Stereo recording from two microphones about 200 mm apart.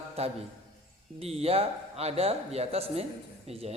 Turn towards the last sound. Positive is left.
turn(degrees=-30)  # may be behind; listen again after turning